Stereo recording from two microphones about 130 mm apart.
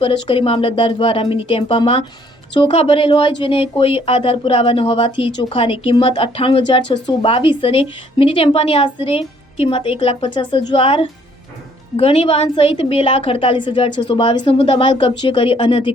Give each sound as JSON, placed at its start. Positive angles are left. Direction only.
{"t": 0.0, "sound": "speech", "side_deg": 45}